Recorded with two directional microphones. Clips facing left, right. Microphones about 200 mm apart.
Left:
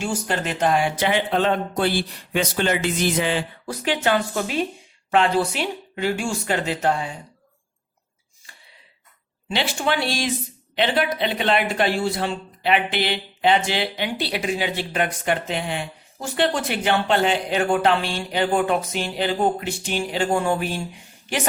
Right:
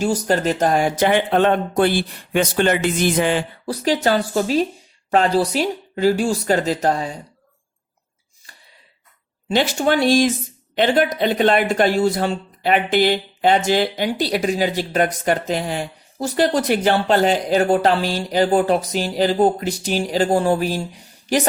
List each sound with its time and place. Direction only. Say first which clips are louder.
0.0 s speech: right 7 dB; 40° right (ahead or behind)
3.7 s speech: right 4 dB; 40° right (ahead or behind)
8.5 s gasp: right 1 dB; 40° right (ahead or behind)
9.5 s speech: right 6 dB; 45° right (ahead or behind)